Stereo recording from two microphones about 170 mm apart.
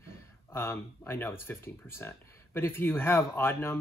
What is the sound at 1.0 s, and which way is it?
Speech, 15° left (ahead or behind).